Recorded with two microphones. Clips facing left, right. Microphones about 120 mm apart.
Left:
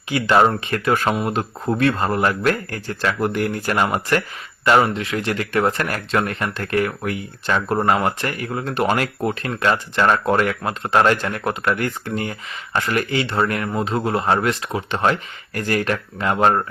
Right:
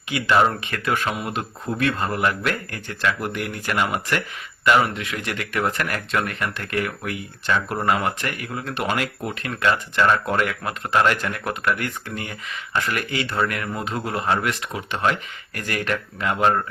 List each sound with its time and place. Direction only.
0.1 s speech: 35° left (ahead or behind)